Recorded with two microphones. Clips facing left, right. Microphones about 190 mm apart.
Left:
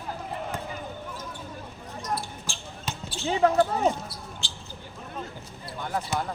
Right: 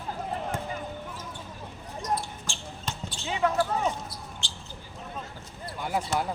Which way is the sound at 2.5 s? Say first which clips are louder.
Even; 5° left (ahead or behind).